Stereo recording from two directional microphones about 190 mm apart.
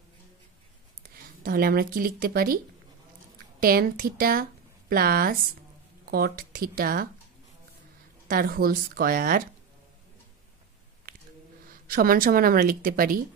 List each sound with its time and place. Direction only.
1.0 s a woman's voice: 50° right (ahead or behind)
8.3 s a woman's voice: 50° right (ahead or behind)
11.9 s a woman's voice: 50° right (ahead or behind)